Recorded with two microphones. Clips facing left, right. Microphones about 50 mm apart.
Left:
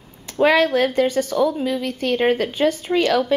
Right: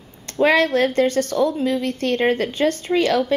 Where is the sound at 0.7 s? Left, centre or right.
Centre.